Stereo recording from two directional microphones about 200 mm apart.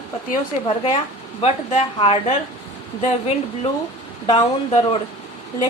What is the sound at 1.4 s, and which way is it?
A woman's voice, 30° left (ahead or behind).